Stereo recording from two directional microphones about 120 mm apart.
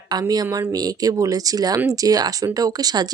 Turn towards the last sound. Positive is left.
turn(degrees=-35)  # may be behind; listen again after turning